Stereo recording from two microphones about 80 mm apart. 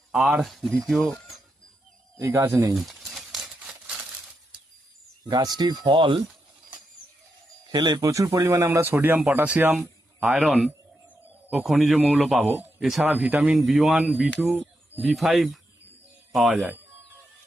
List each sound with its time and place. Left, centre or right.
0.1 s speech: centre
2.7 s crumpling: centre
5.3 s speech: right
7.7 s speech: right
8.0 s speech: right
8.8 s speech: right; by 13.1 s centre
13.1 s speech: centre